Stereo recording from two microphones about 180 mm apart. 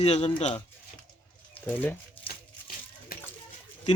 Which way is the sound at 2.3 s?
55° left (ahead or behind).